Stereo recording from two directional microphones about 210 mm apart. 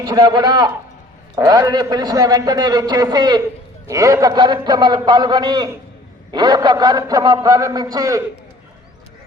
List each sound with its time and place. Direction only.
0.0 s a man's voice: 20° right (ahead or behind)